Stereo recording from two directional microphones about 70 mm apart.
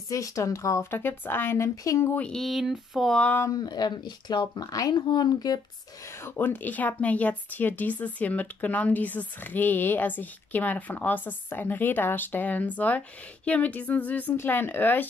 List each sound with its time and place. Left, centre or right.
0.1 s speech: left
0.8 s speech: left
1.9 s speech: left
2.3 s a sound: centre
3.1 s speech: centre
3.4 s speech: left
6.2 s speech: left